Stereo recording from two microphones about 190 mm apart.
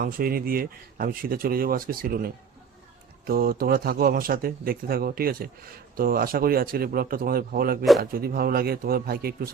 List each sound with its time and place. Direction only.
0.0 s speech: 50° right (ahead or behind)